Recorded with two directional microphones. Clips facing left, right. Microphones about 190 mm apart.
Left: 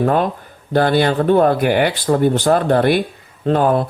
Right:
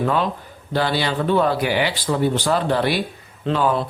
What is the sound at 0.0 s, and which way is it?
Speech, 50° left (ahead or behind).